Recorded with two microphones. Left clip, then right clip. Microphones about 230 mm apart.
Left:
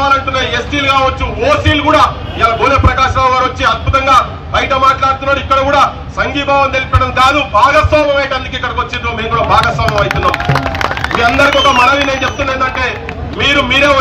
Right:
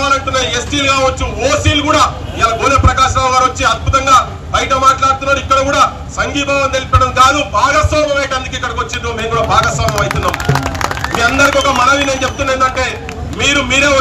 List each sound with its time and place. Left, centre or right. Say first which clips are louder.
0.0 s a man's voice: left 2 dB; right
11.3 s a man's voice: left 3 dB; right